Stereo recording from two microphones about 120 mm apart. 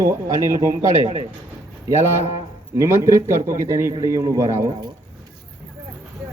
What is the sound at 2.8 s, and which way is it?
A man's voice, 25° right (ahead or behind).